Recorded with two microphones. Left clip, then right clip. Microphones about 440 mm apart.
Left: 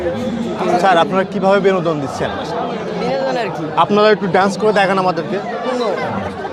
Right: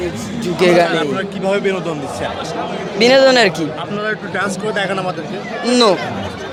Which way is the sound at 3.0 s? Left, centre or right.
Right.